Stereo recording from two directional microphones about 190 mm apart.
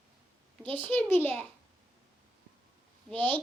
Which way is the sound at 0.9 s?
10° left (ahead or behind).